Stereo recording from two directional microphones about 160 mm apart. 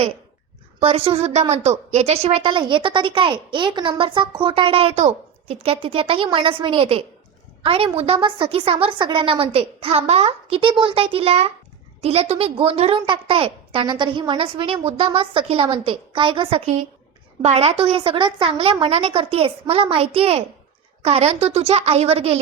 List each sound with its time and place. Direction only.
0.8 s a woman's voice: 40° right (ahead or behind)